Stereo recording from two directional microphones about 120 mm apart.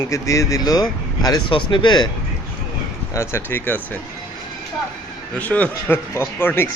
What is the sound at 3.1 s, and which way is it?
Speech, 20° left (ahead or behind).